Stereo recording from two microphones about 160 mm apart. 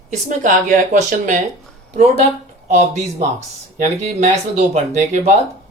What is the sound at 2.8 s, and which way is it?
Speech, 45° right (ahead or behind).